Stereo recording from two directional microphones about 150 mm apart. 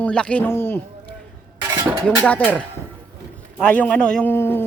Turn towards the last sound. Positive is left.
turn(degrees=15)  # may be behind; listen again after turning